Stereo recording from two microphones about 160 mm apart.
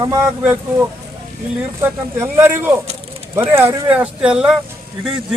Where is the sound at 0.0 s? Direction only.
15° right (ahead or behind).